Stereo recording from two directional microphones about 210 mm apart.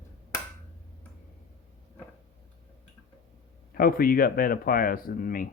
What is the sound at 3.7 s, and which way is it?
Speech, 45° left (ahead or behind).